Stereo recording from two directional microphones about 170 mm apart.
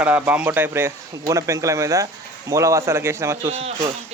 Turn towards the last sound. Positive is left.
turn(degrees=-35)  # may be behind; listen again after turning